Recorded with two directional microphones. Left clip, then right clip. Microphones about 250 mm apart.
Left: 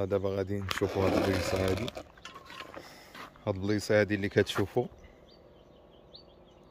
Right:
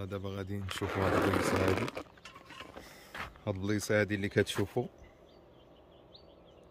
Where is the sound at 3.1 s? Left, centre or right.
Centre.